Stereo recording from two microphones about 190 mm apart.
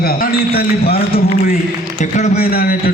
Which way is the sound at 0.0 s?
55° left (ahead or behind).